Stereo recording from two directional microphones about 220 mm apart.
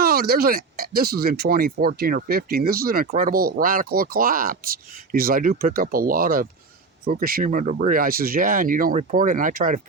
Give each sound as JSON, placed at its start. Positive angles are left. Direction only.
{"t": 0.0, "sound": "speech", "side_deg": -45}